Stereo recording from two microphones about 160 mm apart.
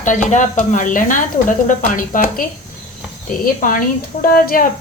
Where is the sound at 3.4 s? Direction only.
60° left (ahead or behind).